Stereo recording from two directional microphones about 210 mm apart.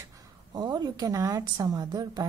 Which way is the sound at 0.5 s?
20° right (ahead or behind).